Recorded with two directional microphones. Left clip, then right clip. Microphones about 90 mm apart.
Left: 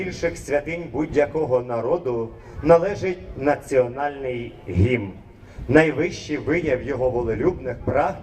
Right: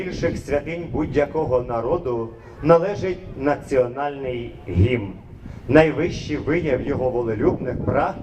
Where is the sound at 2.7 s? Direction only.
40° left (ahead or behind).